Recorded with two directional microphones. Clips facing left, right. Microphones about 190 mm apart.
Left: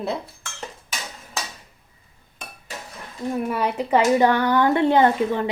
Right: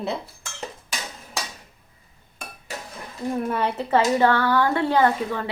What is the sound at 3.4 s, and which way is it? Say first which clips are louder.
Speech: left 1 dB; 10° left (ahead or behind).